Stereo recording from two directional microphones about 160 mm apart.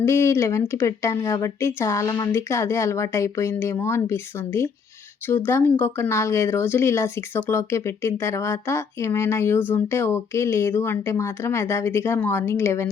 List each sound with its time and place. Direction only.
0.0 s speech: 15° left (ahead or behind)